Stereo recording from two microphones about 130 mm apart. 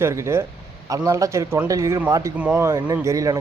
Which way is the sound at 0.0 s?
20° right (ahead or behind).